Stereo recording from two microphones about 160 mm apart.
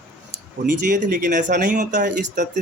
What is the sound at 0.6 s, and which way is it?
Speech, 55° right (ahead or behind).